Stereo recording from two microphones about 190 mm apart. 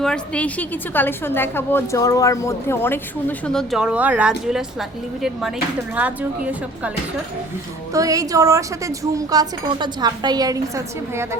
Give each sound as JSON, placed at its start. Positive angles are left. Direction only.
{"t": 0.0, "sound": "a woman's voice", "side_deg": 5}
{"t": 7.9, "sound": "a woman's voice", "side_deg": -20}